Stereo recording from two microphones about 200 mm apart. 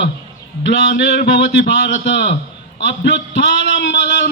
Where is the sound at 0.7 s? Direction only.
55° left (ahead or behind).